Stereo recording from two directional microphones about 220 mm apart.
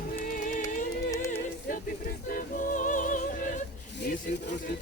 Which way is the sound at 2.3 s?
40° left (ahead or behind).